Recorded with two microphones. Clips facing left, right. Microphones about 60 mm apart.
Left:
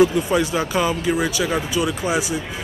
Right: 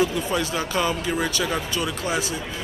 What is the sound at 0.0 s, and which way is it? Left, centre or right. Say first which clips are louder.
Speech: left 6 dB; centre.